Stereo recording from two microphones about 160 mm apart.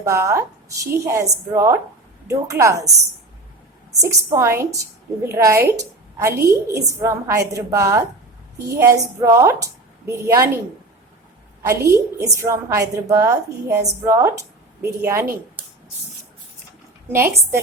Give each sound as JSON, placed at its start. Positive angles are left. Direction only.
{"t": 0.0, "sound": "a woman's voice", "side_deg": -20}
{"t": 4.3, "sound": "a woman's voice", "side_deg": -15}
{"t": 11.6, "sound": "a woman's voice", "side_deg": -20}
{"t": 17.1, "sound": "a woman's voice", "side_deg": -15}